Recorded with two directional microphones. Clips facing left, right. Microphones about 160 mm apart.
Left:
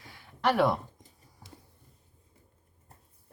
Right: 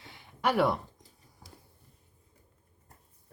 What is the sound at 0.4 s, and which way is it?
Speech, 5° right (ahead or behind).